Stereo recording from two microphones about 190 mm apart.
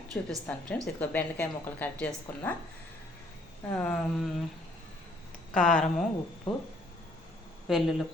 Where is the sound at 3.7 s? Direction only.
5° left (ahead or behind).